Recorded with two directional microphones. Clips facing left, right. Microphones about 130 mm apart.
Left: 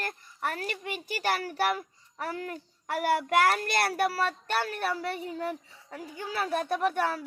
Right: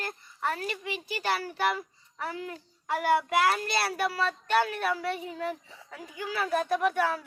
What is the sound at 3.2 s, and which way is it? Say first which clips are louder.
Speech: left 1 dB; 55° left (ahead or behind).